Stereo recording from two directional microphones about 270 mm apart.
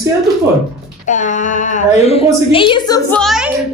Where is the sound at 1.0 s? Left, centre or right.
Left.